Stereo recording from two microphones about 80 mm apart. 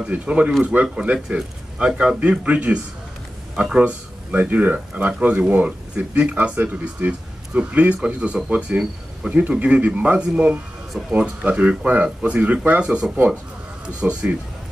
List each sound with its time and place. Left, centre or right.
0.0 s speech: centre